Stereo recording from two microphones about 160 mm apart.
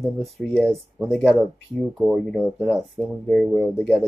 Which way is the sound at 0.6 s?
15° right (ahead or behind).